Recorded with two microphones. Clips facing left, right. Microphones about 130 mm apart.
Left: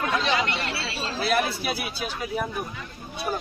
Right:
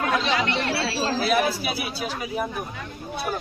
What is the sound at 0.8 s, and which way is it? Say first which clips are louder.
Speech: right 6 dB; 35° right (ahead or behind).